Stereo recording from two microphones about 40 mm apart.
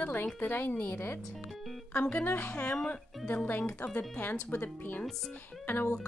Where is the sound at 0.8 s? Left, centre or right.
Left.